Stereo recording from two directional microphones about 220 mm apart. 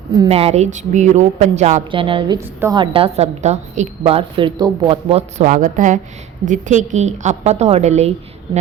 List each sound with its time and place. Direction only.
0.3 s a woman's voice: 30° right (ahead or behind)